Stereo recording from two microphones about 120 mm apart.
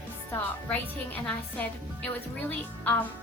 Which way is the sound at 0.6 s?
10° left (ahead or behind).